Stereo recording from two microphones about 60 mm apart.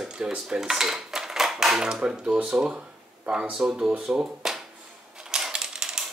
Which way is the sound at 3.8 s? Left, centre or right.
Centre.